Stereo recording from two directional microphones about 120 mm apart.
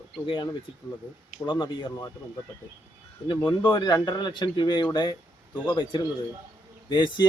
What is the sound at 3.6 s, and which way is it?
Speech, 35° left (ahead or behind).